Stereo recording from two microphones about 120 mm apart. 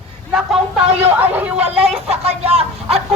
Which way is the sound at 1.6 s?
55° right (ahead or behind).